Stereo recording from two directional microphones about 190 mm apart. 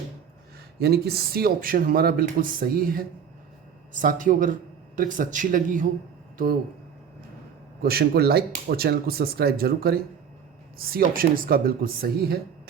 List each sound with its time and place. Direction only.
0.8 s speech: 55° right (ahead or behind)
7.8 s speech: 55° right (ahead or behind)